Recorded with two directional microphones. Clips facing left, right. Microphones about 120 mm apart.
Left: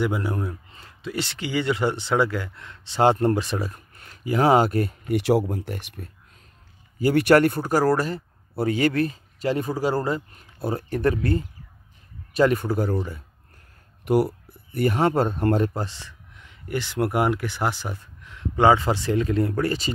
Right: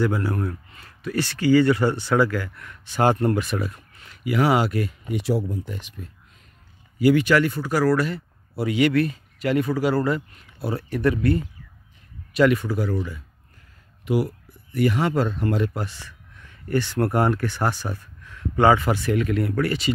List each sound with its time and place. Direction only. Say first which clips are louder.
0.0 s speech: right 2 dB; 20° left (ahead or behind)
3.7 s speech: even; 45° left (ahead or behind)
5.0 s speech: left 6 dB; 75° left (ahead or behind)
7.2 s speech: left 3 dB; 55° left (ahead or behind)
14.7 s speech: left 1 dB; 45° left (ahead or behind)